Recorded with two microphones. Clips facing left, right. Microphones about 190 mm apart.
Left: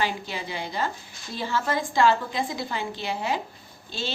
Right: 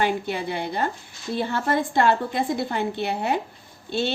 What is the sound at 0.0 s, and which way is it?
A woman's voice, 55° right (ahead or behind).